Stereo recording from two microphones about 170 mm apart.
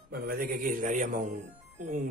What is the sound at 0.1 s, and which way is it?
A man's voice, 60° right (ahead or behind).